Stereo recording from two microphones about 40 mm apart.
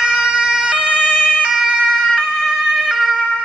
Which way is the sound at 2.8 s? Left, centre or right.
Centre.